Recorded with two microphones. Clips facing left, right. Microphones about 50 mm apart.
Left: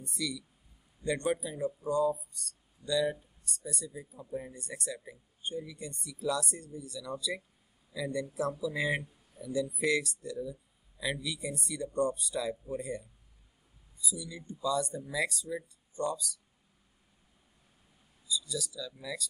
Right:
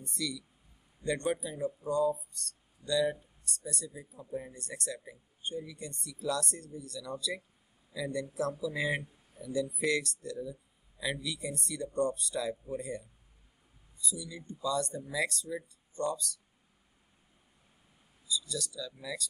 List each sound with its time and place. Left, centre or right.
0.0 s speech: centre
14.0 s speech: centre
18.5 s speech: centre